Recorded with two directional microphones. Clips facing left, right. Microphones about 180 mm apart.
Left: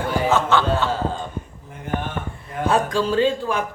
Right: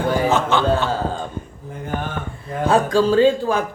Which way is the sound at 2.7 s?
30° right (ahead or behind).